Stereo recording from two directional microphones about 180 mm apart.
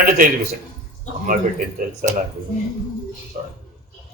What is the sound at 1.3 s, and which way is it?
Speech, 50° right (ahead or behind).